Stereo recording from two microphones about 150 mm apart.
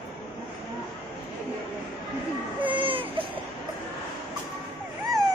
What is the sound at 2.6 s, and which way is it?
Baby cry, 35° right (ahead or behind).